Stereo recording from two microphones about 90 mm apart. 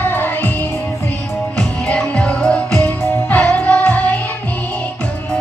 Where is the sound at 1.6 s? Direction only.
10° left (ahead or behind).